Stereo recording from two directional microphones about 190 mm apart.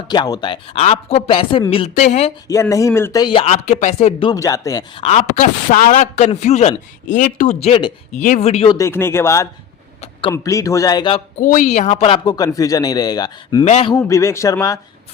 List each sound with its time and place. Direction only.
0.1 s a man's voice: 25° left (ahead or behind)
2.5 s a man's voice: 15° left (ahead or behind)
4.4 s a man's voice: 15° left (ahead or behind)
5.0 s a man's voice: 40° left (ahead or behind)
8.2 s a man's voice: 40° left (ahead or behind)
8.9 s speech: 15° left (ahead or behind)
10.0 s a sound: 25° left (ahead or behind)
10.3 s speech: 15° left (ahead or behind)
11.3 s a man's voice: 40° left (ahead or behind); by 13.7 s 20° left (ahead or behind)
13.7 s a man's voice: 30° left (ahead or behind)
13.9 s speech: 15° left (ahead or behind)